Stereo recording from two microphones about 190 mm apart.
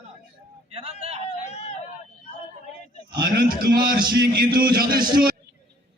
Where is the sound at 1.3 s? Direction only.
35° left (ahead or behind).